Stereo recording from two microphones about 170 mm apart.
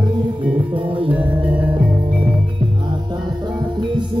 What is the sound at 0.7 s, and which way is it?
Music, 30° right (ahead or behind).